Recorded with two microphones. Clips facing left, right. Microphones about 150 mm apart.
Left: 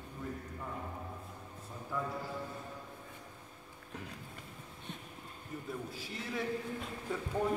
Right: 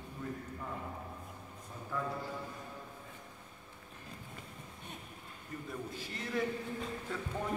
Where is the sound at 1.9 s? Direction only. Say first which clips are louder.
Even; 10° left (ahead or behind).